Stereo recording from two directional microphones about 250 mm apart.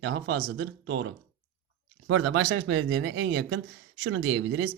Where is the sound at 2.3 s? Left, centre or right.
Right.